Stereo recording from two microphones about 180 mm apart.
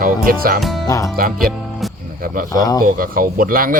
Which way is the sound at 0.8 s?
20° left (ahead or behind).